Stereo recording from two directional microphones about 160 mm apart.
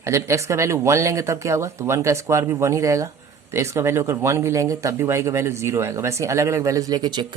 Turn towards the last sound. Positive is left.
turn(degrees=-25)  # may be behind; listen again after turning